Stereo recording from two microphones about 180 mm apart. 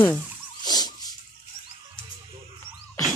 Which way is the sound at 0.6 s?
20° left (ahead or behind).